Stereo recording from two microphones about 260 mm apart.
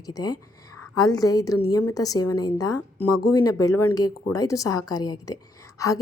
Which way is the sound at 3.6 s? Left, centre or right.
Left.